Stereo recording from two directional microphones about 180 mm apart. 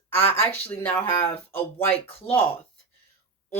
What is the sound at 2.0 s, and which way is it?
Speech, 30° left (ahead or behind).